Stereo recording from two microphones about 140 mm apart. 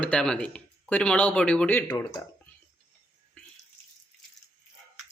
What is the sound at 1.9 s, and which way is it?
Speech, 25° left (ahead or behind).